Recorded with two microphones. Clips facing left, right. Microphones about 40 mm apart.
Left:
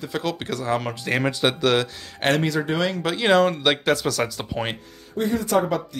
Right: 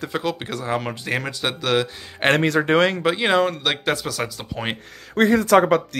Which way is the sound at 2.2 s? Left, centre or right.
Right.